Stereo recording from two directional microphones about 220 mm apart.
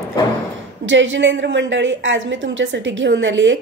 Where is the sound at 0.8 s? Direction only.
55° right (ahead or behind).